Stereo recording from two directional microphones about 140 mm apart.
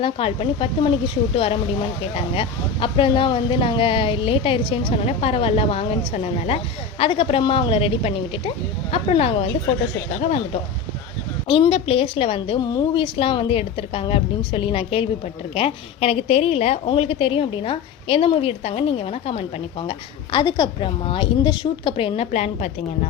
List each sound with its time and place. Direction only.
0.0 s speech: 40° left (ahead or behind)
2.1 s speech: 40° left (ahead or behind)
11.4 s a woman's voice: 40° left (ahead or behind)
19.9 s speech: 35° left (ahead or behind)